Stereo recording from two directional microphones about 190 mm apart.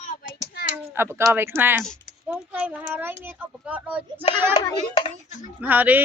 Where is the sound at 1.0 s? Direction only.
10° right (ahead or behind).